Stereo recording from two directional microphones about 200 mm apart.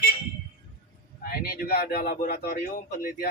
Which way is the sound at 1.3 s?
50° left (ahead or behind).